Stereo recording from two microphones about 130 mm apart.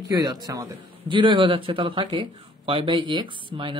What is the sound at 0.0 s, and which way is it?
A man's voice, 30° right (ahead or behind).